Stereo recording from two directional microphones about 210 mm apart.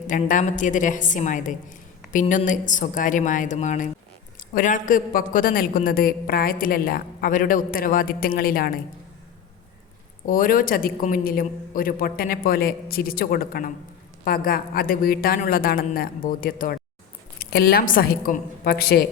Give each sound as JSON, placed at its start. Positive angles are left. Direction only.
{"t": 0.1, "sound": "a woman's voice", "side_deg": 40}
{"t": 10.2, "sound": "a man's voice", "side_deg": 40}